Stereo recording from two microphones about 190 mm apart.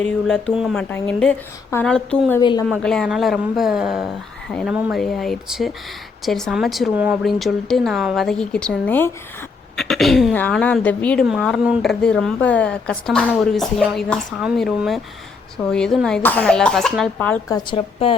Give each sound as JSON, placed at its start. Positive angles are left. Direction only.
{"t": 0.0, "sound": "a woman's voice", "side_deg": 5}
{"t": 2.4, "sound": "a woman's voice", "side_deg": 25}
{"t": 2.6, "sound": "a woman's voice", "side_deg": 5}
{"t": 17.7, "sound": "a woman's voice", "side_deg": 30}